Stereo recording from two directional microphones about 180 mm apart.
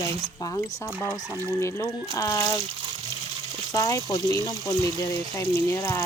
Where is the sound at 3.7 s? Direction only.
20° left (ahead or behind).